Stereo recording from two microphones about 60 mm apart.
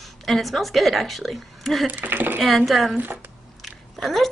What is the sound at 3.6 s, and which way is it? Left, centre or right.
Chewing, centre.